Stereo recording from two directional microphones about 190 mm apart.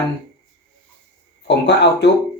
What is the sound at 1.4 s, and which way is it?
Speech, 65° left (ahead or behind).